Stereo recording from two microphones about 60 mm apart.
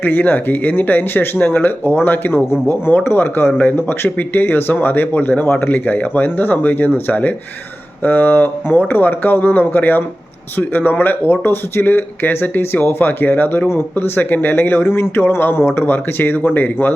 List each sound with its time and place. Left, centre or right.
0.0 s speech: left